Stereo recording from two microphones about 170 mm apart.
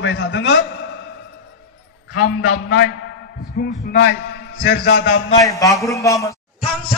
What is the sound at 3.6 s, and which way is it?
Speech, 65° left (ahead or behind).